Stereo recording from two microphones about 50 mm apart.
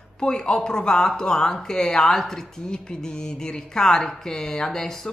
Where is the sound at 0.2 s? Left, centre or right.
Centre.